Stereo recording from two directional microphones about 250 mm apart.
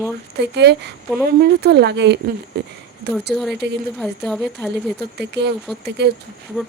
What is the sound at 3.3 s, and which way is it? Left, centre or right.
Speech, centre.